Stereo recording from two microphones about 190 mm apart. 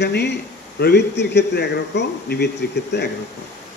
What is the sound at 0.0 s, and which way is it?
A man's voice, 65° left (ahead or behind).